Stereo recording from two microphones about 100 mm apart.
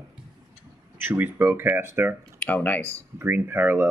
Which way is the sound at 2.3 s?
15° left (ahead or behind).